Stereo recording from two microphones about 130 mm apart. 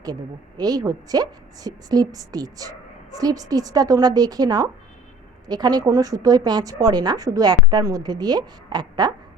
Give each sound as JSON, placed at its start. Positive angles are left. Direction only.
{"t": 0.0, "sound": "a woman's voice", "side_deg": -30}